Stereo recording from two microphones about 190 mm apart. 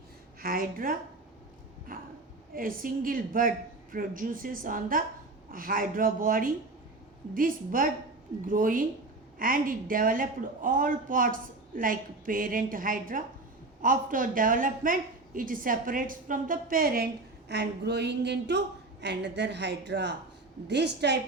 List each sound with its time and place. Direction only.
0.4 s a woman's voice: 50° right (ahead or behind)
1.9 s a sound: 45° right (ahead or behind)
2.6 s a woman's voice: 45° right (ahead or behind)